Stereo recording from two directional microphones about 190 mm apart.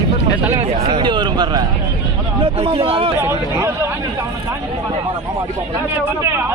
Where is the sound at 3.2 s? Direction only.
10° right (ahead or behind).